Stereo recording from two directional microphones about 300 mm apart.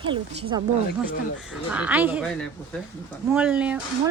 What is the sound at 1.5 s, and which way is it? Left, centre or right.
Speech, centre.